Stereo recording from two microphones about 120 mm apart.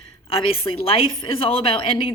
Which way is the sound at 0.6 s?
50° left (ahead or behind).